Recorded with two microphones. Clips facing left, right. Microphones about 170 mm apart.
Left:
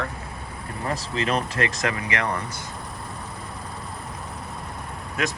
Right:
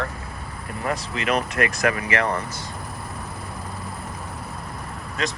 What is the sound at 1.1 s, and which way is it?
Speech, 30° left (ahead or behind).